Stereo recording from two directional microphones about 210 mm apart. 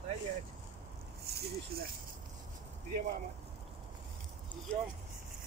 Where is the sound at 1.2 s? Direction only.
50° right (ahead or behind).